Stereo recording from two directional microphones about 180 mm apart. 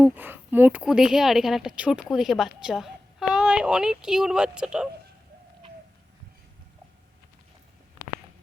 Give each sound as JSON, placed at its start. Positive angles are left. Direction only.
{"t": 0.0, "sound": "a woman's voice", "side_deg": -10}